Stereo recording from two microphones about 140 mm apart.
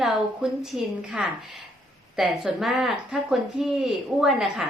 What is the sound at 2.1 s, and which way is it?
Speech, 5° right (ahead or behind).